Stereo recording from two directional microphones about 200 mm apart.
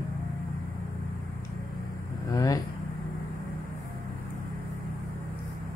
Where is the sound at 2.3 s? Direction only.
20° left (ahead or behind).